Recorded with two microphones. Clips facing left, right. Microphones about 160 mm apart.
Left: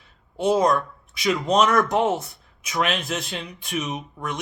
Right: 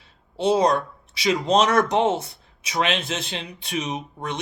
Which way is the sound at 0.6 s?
35° right (ahead or behind).